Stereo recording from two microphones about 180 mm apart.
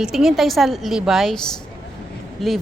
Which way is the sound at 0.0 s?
Centre (ahead or behind).